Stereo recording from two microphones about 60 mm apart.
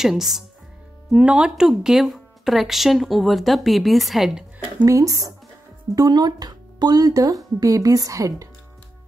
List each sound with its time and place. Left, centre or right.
0.0 s speech: centre
1.1 s speech: centre
1.7 s speech: centre
4.8 s speech: right
5.9 s speech: right